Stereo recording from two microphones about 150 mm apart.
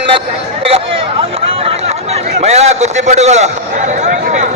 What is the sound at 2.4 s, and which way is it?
A man's voice, 45° right (ahead or behind).